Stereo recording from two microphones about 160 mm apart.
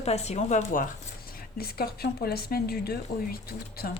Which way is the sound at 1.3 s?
70° left (ahead or behind).